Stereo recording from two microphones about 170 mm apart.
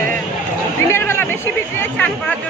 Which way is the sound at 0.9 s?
15° left (ahead or behind).